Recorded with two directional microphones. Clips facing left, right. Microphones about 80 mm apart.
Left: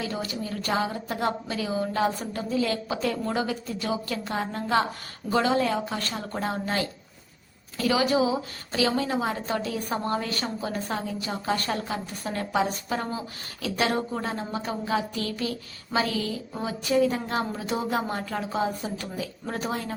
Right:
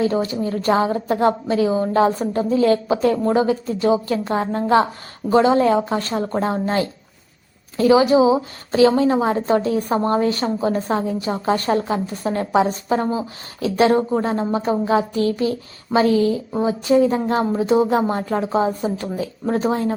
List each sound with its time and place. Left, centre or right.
0.0 s a woman's voice: right